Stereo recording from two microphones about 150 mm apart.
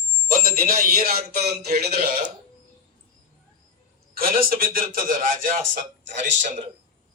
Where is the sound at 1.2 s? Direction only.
50° right (ahead or behind).